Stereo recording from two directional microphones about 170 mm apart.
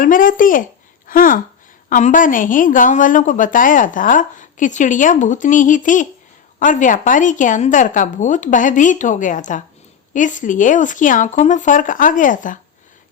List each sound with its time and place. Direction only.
0.0 s a woman's voice: 55° left (ahead or behind)